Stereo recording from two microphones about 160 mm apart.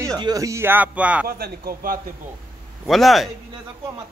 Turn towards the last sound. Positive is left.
turn(degrees=0)  # may be behind; listen again after turning